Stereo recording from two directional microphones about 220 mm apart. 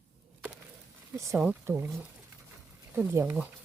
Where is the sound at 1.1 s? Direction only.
15° right (ahead or behind).